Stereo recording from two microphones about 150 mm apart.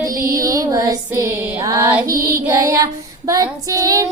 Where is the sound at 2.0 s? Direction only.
20° right (ahead or behind).